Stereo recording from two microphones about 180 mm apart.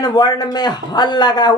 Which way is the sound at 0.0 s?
25° left (ahead or behind).